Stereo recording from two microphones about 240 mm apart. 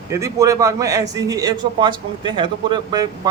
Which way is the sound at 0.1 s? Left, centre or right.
Centre.